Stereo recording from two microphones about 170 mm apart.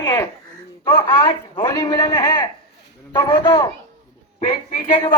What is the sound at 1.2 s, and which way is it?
A woman's voice, 30° left (ahead or behind).